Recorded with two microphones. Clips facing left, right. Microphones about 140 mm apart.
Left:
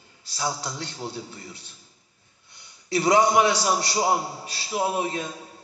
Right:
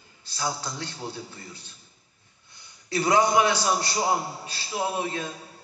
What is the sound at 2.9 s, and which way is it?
A man's voice, 25° left (ahead or behind).